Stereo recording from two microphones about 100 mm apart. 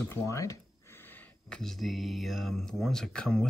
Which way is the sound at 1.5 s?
5° left (ahead or behind).